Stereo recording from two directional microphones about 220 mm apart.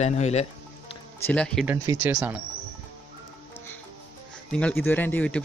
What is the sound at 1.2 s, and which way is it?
Speech, 5° left (ahead or behind).